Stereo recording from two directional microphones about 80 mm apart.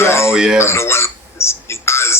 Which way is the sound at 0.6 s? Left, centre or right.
Left.